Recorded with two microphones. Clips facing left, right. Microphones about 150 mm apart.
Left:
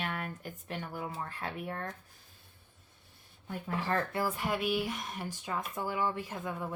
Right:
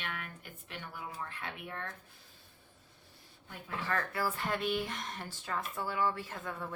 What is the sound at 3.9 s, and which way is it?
Speech, 25° left (ahead or behind).